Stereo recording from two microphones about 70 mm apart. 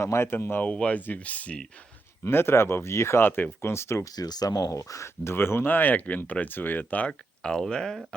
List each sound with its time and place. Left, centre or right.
0.0 s speech: left
0.7 s speech: centre
2.2 s speech: left
4.0 s speech: left
7.1 s speech: centre